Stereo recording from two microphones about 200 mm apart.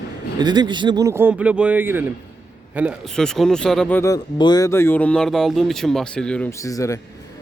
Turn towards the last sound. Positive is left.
turn(degrees=15)  # may be behind; listen again after turning